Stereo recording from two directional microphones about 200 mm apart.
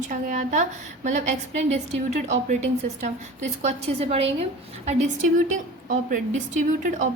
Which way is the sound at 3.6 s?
30° right (ahead or behind).